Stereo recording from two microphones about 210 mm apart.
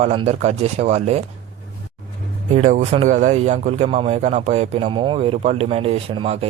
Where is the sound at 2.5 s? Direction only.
35° right (ahead or behind).